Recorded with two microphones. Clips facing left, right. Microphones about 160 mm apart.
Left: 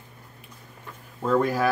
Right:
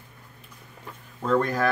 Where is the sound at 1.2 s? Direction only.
5° left (ahead or behind).